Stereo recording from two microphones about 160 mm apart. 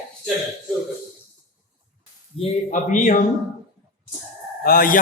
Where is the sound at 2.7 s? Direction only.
50° left (ahead or behind).